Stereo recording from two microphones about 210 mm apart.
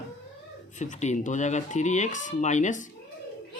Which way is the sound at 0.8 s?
35° left (ahead or behind).